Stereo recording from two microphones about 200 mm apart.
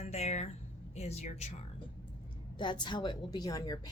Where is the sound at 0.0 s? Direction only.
35° left (ahead or behind).